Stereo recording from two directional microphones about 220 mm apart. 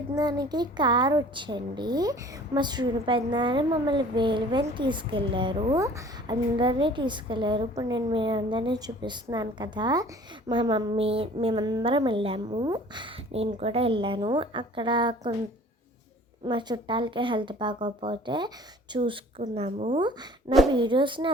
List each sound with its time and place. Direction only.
0.2 s a woman's voice: 20° right (ahead or behind)
16.5 s a woman's voice: 20° right (ahead or behind)